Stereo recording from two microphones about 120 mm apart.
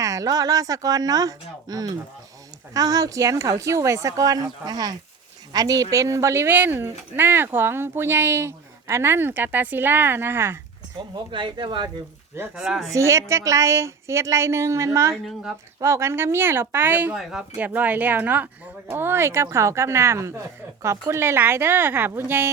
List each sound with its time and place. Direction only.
0.0 s speech: 25° right (ahead or behind)
11.1 s speech: 45° right (ahead or behind)
12.5 s speech: centre (ahead or behind)
12.9 s speech: 25° right (ahead or behind)
15.1 s speech: centre (ahead or behind)
15.8 s speech: 20° right (ahead or behind)